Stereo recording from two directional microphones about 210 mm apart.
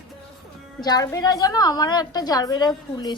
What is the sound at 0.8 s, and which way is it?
A woman's voice, 20° left (ahead or behind).